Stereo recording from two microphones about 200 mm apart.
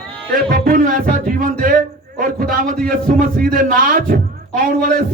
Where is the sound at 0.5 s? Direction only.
45° right (ahead or behind).